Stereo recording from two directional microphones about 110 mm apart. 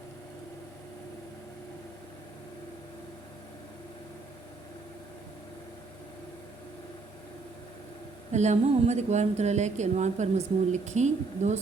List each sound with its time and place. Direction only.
8.3 s a woman's voice: 90° right